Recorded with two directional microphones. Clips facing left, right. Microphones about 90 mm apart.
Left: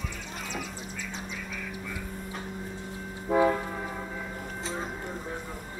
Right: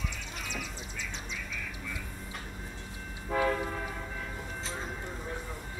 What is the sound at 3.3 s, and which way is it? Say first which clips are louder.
Train: left 6 dB; 20° left (ahead or behind).